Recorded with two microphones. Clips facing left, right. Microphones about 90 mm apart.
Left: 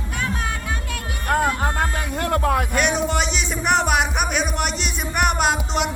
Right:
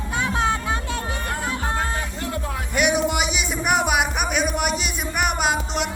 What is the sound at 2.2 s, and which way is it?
Music, 60° left (ahead or behind).